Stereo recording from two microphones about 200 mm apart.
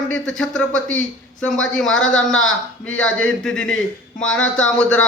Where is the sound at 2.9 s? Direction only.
80° left.